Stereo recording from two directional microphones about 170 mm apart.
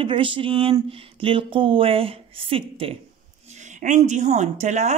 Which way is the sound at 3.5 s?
45° right (ahead or behind).